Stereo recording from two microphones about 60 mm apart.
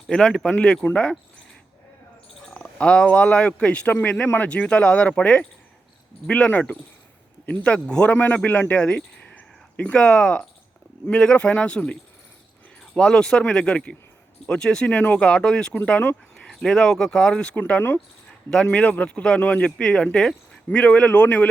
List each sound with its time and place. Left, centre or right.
0.1 s speech: centre
2.5 s speech: centre
17.5 s speech: left